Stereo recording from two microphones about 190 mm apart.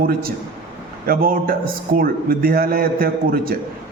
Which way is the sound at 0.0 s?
50° right (ahead or behind).